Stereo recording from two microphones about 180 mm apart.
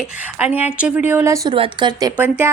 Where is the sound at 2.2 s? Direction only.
10° right (ahead or behind).